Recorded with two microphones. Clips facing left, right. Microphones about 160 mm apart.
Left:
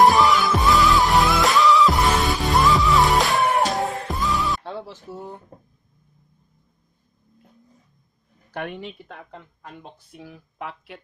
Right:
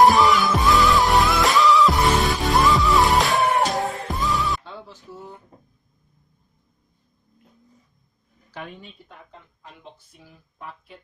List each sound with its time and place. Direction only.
0.0 s music: centre (ahead or behind)
8.5 s a woman's voice: 70° left (ahead or behind)